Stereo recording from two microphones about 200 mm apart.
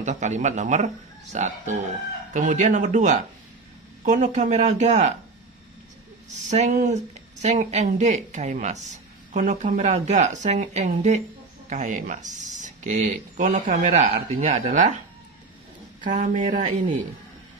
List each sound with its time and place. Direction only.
0.0 s speech: 35° right (ahead or behind)
6.5 s speech: 35° right (ahead or behind)
16.0 s speech: 40° right (ahead or behind)